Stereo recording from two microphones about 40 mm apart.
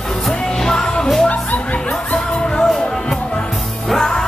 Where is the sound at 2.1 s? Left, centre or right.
Left.